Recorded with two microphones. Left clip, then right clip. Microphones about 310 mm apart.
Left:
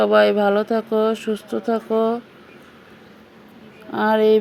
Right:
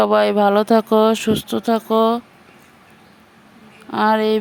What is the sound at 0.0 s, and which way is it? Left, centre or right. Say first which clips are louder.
Speech: right 1 dB; right.